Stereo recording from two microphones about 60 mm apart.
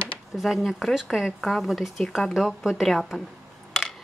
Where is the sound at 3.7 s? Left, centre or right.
Centre.